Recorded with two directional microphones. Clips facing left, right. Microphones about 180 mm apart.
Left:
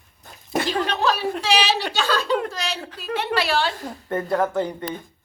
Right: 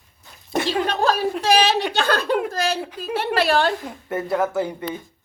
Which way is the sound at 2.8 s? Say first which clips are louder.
Right 2 dB; 10° right (ahead or behind).